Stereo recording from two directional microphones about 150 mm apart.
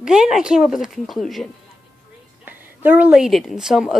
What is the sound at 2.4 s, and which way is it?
A woman's voice, 10° right (ahead or behind).